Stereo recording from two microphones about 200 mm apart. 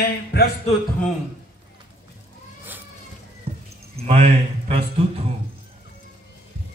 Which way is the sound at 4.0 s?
30° right (ahead or behind).